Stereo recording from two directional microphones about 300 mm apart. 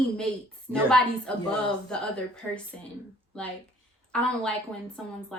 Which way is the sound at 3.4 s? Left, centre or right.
Centre.